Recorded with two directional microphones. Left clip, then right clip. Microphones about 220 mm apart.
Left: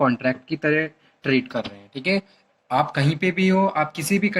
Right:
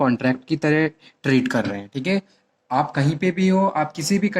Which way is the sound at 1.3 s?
40° right (ahead or behind).